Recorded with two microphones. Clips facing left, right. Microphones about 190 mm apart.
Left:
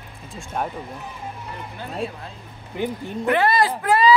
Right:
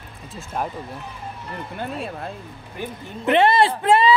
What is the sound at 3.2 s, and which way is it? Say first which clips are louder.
Speech: right 3 dB; 25° right (ahead or behind).